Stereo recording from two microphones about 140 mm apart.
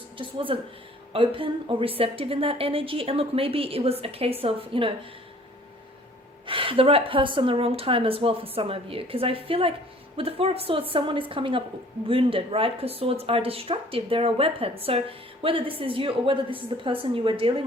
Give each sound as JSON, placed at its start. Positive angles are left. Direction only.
{"t": 0.2, "sound": "speech", "side_deg": -40}
{"t": 6.4, "sound": "speech", "side_deg": -40}